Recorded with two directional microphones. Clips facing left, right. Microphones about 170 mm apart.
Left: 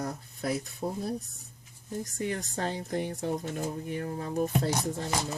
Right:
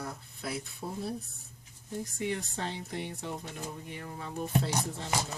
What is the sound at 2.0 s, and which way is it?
Speech, 45° left (ahead or behind).